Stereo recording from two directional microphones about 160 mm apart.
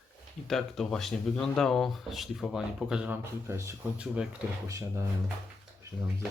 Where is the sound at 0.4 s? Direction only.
Centre (ahead or behind).